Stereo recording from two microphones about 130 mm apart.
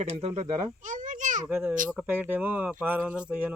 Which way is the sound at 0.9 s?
80° right.